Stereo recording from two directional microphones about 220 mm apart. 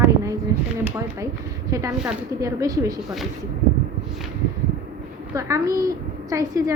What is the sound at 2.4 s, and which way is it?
Speech, 15° right (ahead or behind).